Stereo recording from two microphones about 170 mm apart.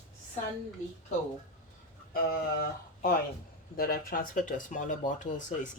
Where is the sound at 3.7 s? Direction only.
60° left (ahead or behind).